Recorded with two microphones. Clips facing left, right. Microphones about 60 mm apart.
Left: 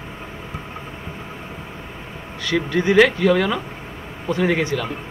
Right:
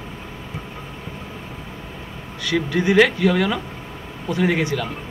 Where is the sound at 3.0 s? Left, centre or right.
Centre.